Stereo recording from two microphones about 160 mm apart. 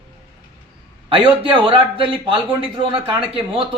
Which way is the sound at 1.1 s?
35° right (ahead or behind).